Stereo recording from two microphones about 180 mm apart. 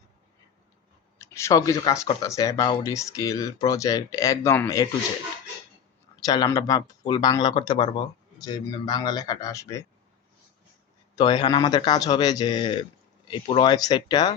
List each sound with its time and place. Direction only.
1.2 s speech: 15° left (ahead or behind)
6.1 s speech: 20° left (ahead or behind)
11.1 s speech: 25° left (ahead or behind)